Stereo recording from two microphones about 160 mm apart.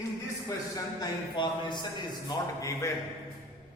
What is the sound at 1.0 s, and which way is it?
A man's voice, 30° left (ahead or behind).